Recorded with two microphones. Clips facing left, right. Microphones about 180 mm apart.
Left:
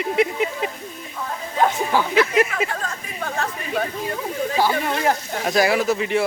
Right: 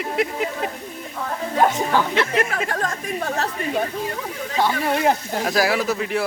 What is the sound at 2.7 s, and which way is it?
Speech, 45° right (ahead or behind).